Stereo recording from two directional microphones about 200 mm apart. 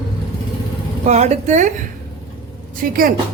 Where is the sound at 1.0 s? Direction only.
35° right (ahead or behind).